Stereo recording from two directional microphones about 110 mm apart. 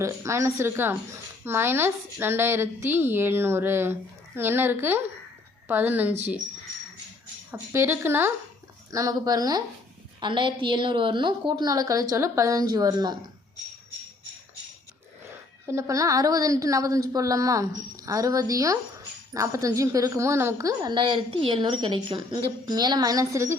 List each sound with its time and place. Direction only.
0.0 s a woman's voice: 25° right (ahead or behind)
7.7 s a woman's voice: 20° right (ahead or behind)
8.9 s a woman's voice: 30° right (ahead or behind)
15.6 s a woman's voice: 25° right (ahead or behind)
20.9 s a woman's voice: 45° right (ahead or behind)
22.6 s a woman's voice: 40° right (ahead or behind)